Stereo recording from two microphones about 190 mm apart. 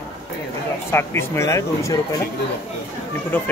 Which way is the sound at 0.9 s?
15° left (ahead or behind).